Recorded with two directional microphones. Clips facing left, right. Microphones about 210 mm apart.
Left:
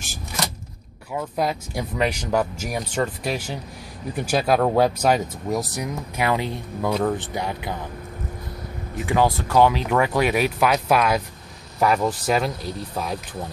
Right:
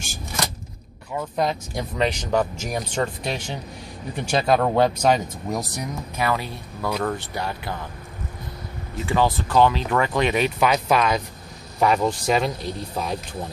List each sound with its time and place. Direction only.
1.1 s speech: 5° left (ahead or behind)
6.2 s speech: 20° left (ahead or behind)
8.9 s speech: 15° left (ahead or behind)